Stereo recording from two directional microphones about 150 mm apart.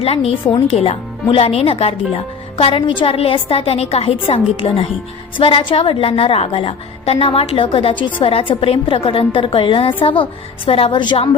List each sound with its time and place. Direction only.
0.0 s a woman's voice: 40° left (ahead or behind)